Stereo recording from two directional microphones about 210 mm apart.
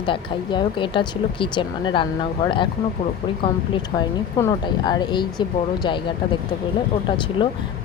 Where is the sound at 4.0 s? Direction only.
20° left (ahead or behind).